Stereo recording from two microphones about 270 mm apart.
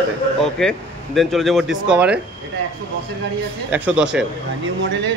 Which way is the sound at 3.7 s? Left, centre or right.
Centre.